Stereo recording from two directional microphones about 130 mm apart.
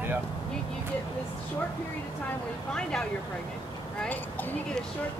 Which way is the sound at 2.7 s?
5° left (ahead or behind).